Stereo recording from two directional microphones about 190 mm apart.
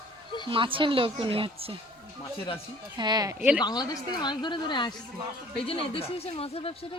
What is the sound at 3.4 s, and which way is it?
Speech, 5° right (ahead or behind).